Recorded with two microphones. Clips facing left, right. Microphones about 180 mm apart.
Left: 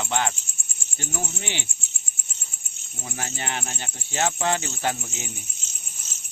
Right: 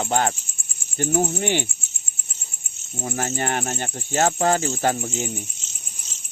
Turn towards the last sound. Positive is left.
turn(degrees=-50)  # may be behind; listen again after turning